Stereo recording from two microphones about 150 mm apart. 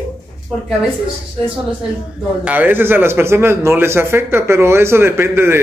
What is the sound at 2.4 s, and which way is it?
A man's voice, 10° right (ahead or behind).